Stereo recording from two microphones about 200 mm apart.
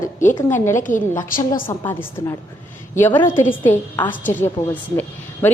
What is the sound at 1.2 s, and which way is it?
Speech, 45° left (ahead or behind).